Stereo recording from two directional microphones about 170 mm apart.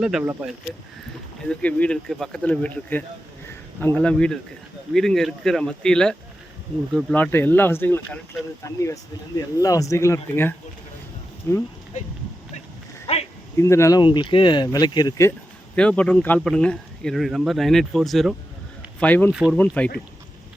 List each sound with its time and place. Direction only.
0.0 s speech: 5° right (ahead or behind)
1.5 s speech: 5° left (ahead or behind)
13.6 s speech: 15° left (ahead or behind)
14.0 s speech: 30° left (ahead or behind)
15.7 s speech: 5° left (ahead or behind)